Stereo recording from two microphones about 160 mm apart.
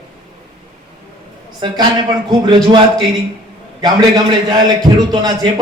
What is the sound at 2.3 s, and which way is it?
Speech, 30° right (ahead or behind).